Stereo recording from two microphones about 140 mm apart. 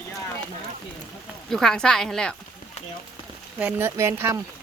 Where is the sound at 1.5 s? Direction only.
5° left (ahead or behind).